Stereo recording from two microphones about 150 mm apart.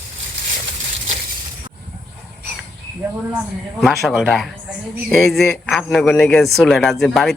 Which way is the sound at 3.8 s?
Centre (ahead or behind).